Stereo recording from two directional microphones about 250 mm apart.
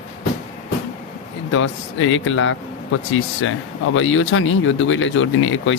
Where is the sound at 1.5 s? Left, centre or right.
Left.